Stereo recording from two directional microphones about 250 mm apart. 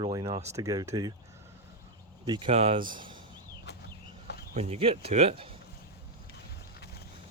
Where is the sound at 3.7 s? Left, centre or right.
Left.